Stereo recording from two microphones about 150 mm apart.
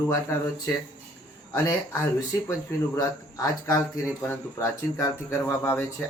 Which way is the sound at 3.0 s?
25° left (ahead or behind).